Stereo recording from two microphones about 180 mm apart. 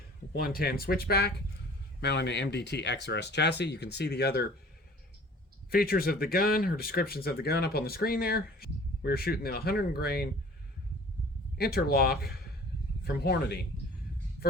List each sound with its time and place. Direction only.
0.3 s speech: 55° left (ahead or behind)
5.7 s speech: 55° left (ahead or behind)
11.5 s speech: 60° left (ahead or behind)